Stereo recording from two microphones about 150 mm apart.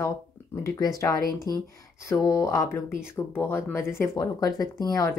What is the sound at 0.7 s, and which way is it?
Speech, 25° left (ahead or behind).